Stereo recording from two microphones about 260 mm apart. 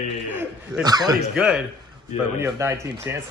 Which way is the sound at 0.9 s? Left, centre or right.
Centre.